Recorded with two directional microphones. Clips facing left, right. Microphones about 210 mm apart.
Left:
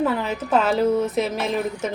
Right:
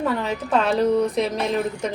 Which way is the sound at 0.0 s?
5° left (ahead or behind).